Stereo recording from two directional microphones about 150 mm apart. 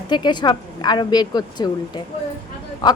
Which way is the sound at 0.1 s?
30° left (ahead or behind).